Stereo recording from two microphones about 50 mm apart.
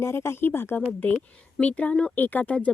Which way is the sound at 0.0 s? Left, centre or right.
Left.